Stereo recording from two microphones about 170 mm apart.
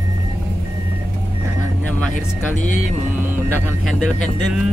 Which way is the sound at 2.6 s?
45° left (ahead or behind).